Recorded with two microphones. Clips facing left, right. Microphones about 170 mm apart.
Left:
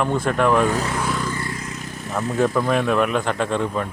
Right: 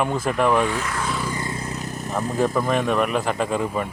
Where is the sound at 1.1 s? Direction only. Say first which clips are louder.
Left 1 dB; 15° right (ahead or behind).